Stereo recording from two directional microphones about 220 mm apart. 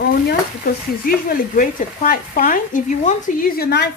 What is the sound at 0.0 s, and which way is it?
Speech, 45° left (ahead or behind).